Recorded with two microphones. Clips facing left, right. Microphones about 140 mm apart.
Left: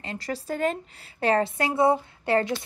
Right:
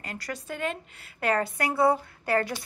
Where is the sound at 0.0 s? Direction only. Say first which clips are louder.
Left 4 dB; 25° left (ahead or behind).